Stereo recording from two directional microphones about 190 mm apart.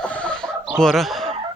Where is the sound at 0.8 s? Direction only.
Centre (ahead or behind).